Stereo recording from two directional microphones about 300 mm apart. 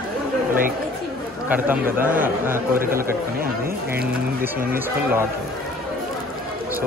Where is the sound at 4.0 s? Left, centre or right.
Right.